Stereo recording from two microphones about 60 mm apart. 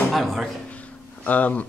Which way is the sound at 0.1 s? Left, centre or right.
Centre.